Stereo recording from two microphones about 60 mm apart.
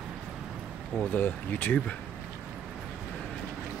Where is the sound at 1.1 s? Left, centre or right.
Left.